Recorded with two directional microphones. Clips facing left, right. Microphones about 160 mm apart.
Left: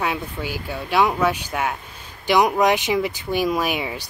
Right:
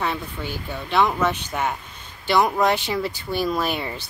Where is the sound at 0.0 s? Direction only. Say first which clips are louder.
Left 2 dB; 10° left (ahead or behind).